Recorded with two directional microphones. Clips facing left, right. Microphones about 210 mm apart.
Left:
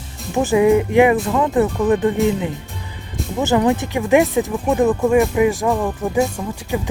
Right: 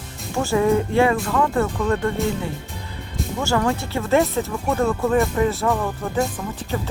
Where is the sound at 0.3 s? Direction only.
15° left (ahead or behind).